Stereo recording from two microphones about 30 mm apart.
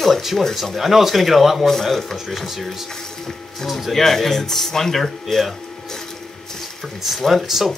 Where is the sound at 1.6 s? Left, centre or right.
Centre.